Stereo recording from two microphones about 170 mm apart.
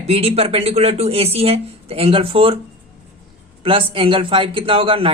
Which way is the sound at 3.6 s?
30° right (ahead or behind).